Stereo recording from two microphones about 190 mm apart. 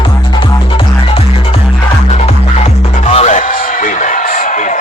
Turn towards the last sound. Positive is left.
turn(degrees=40)  # may be behind; listen again after turning